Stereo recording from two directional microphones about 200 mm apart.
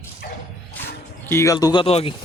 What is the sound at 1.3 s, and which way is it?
Speech, 15° left (ahead or behind).